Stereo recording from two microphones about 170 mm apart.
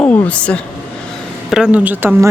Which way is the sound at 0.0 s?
10° left (ahead or behind).